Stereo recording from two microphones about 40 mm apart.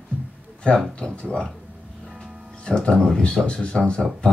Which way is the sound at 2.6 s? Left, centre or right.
Left.